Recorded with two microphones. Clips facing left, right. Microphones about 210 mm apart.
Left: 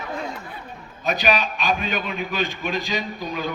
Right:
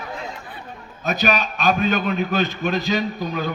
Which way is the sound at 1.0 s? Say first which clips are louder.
Right 1 dB; 45° right (ahead or behind).